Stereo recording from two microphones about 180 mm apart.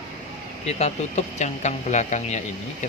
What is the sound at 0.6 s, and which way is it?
Speech, 40° left (ahead or behind).